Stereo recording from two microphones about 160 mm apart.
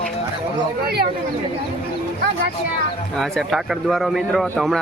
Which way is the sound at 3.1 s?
Centre (ahead or behind).